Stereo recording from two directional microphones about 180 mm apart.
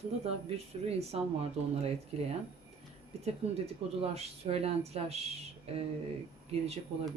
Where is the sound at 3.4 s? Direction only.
35° right (ahead or behind).